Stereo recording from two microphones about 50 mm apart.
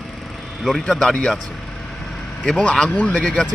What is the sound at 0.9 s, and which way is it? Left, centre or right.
Speech, centre.